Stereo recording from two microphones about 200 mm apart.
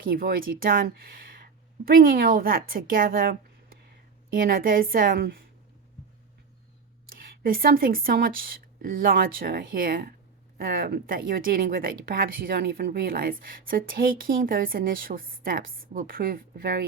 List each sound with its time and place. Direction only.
0.0 s a woman's voice: 45° right (ahead or behind)
4.4 s a woman's voice: 45° right (ahead or behind)
7.4 s a woman's voice: 45° right (ahead or behind)